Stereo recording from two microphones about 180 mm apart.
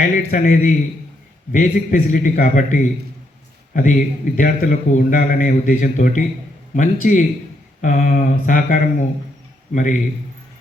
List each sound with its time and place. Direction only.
0.0 s a man's voice: 50° left (ahead or behind)